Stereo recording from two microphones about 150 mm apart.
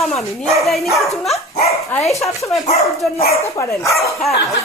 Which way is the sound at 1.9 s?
10° left (ahead or behind).